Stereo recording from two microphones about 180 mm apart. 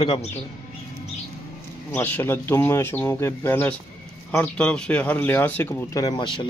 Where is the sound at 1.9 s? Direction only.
10° left (ahead or behind).